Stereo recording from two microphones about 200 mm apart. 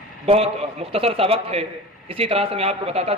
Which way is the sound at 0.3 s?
30° right (ahead or behind).